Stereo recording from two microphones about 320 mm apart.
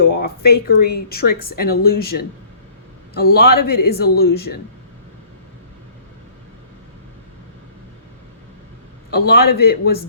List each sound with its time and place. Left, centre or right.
0.0 s speech: left
9.0 s speech: left